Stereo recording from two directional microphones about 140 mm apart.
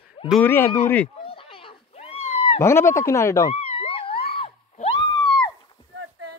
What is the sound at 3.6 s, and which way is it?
Wail, 40° left (ahead or behind).